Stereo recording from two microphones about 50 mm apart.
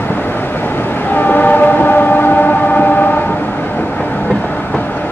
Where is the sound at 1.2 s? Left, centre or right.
Left.